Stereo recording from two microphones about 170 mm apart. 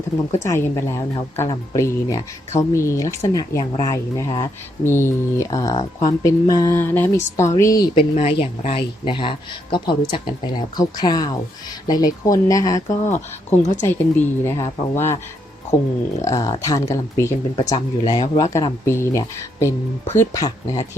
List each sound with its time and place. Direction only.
0.3 s a woman's voice: 15° left (ahead or behind)
7.9 s speech: 35° left (ahead or behind); by 13.0 s 20° left (ahead or behind)
13.1 s speech: 45° left (ahead or behind)
13.8 s a woman's voice: 10° left (ahead or behind)
16.2 s a woman's voice: 20° left (ahead or behind)